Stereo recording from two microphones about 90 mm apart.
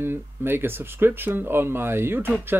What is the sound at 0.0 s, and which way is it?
Speech, 25° right (ahead or behind).